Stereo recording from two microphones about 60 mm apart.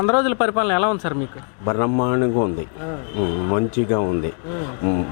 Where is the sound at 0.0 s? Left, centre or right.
Left.